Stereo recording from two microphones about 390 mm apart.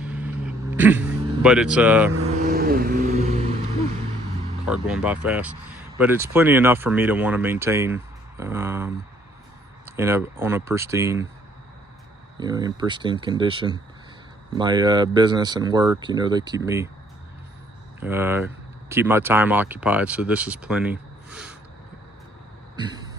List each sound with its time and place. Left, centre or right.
0.0 s vehicle: centre
2.4 s vehicle: right
4.7 s speech: centre
12.4 s speech: centre
18.0 s speech: centre
22.8 s vehicle: centre